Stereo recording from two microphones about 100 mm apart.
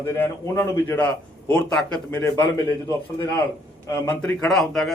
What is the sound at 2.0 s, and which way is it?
Speech, 15° left (ahead or behind).